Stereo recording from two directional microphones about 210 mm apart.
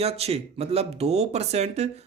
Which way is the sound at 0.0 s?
30° right (ahead or behind).